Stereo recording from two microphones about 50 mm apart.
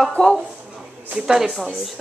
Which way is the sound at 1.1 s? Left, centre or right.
Centre.